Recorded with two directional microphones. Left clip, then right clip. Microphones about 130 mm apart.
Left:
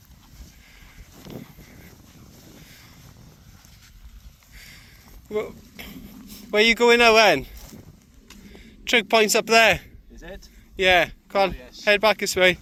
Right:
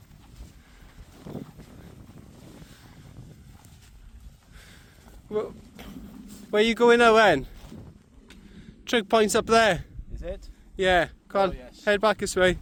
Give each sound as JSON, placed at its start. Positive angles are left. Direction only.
{"t": 5.3, "sound": "a sound", "side_deg": -35}
{"t": 6.5, "sound": "speech", "side_deg": -35}
{"t": 8.9, "sound": "speech", "side_deg": -40}